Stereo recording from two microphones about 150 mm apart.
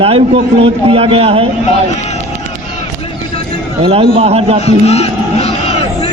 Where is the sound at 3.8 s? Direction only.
40° right (ahead or behind).